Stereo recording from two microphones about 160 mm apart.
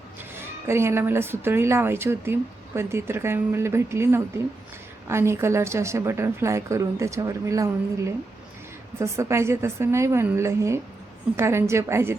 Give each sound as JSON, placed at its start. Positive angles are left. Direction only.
{"t": 0.3, "sound": "speech", "side_deg": -15}